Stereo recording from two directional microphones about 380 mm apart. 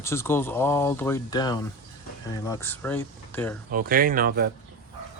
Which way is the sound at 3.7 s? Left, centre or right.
Right.